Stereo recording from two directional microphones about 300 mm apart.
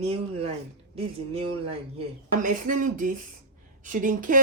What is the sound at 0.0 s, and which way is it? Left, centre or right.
Speech, centre.